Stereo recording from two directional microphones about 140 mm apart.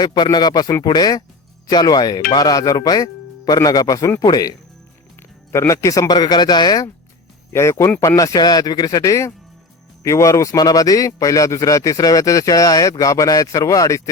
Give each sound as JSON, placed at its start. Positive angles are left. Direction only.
{"t": 0.0, "sound": "a man's voice", "side_deg": 30}
{"t": 7.5, "sound": "a man's voice", "side_deg": 20}